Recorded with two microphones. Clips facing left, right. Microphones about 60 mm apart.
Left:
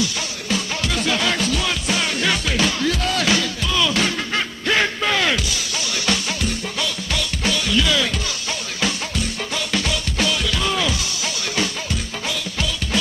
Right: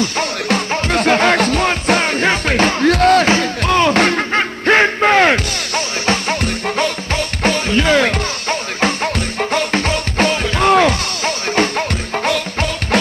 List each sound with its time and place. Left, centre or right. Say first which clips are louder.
0.0 s music: right 7 dB; right